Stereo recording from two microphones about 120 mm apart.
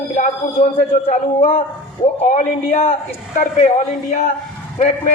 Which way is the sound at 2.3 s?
60° left (ahead or behind).